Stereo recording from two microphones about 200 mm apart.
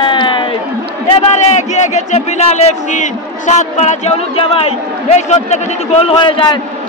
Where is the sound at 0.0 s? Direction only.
25° left (ahead or behind).